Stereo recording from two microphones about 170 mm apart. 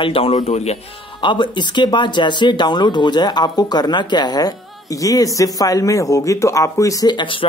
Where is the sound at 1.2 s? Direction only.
25° left (ahead or behind).